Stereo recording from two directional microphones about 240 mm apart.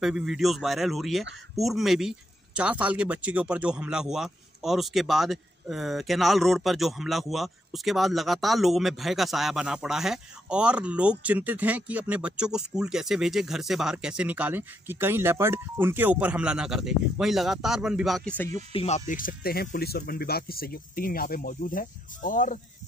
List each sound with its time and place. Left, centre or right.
0.0 s speech: centre
18.7 s speech: left